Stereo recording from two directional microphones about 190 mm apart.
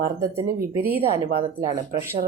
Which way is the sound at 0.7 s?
15° right (ahead or behind).